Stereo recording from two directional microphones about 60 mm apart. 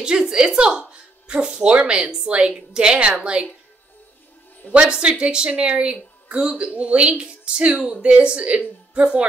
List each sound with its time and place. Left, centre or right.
0.0 s a woman's voice: centre
4.7 s a woman's voice: centre